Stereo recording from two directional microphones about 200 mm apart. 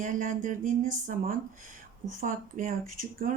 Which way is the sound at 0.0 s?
40° right (ahead or behind).